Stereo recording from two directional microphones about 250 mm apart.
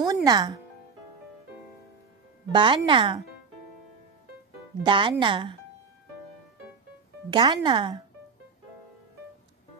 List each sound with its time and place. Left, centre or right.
0.0 s music: centre
2.5 s speech: centre
4.8 s speech: centre
7.2 s speech: centre